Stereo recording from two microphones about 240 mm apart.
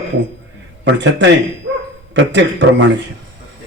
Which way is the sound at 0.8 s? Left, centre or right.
Right.